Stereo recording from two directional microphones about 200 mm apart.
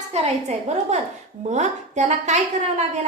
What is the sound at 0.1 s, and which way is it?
A woman's voice, 35° right (ahead or behind).